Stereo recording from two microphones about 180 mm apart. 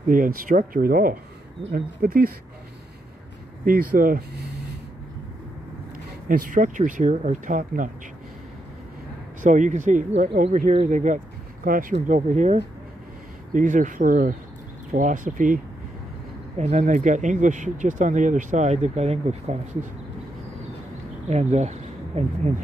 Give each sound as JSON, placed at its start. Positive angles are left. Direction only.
{"t": 0.1, "sound": "speech", "side_deg": -50}
{"t": 3.6, "sound": "speech", "side_deg": -55}
{"t": 6.2, "sound": "speech", "side_deg": -50}
{"t": 9.4, "sound": "speech", "side_deg": -45}
{"t": 21.3, "sound": "speech", "side_deg": -40}